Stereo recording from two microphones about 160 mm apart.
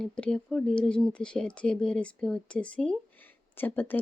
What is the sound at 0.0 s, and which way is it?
Speech, 5° left (ahead or behind).